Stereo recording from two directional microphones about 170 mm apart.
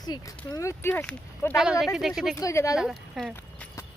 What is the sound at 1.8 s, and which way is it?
Speech, centre (ahead or behind).